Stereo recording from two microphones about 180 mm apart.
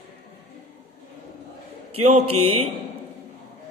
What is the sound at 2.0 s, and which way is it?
Speech, 35° right (ahead or behind).